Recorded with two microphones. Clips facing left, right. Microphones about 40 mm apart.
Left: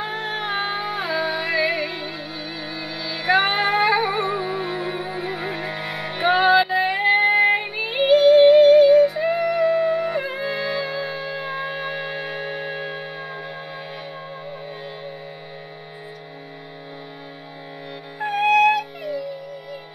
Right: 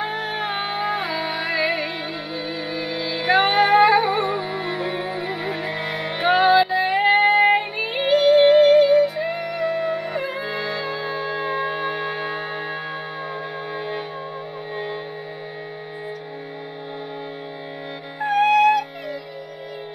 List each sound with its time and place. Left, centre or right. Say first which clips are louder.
0.1 s music: even; centre
12.6 s music: even; centre
13.7 s music: right 6 dB; centre
18.2 s music: right 1 dB; centre